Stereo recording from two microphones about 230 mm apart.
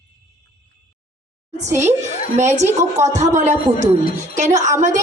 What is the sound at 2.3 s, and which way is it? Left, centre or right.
A woman's voice, right.